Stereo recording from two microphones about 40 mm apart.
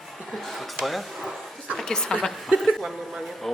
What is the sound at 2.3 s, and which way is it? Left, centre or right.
A woman's voice, centre.